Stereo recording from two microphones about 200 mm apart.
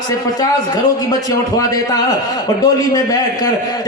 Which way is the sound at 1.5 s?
20° left (ahead or behind).